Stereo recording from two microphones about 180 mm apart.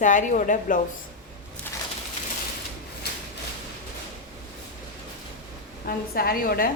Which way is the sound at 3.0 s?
65° left (ahead or behind).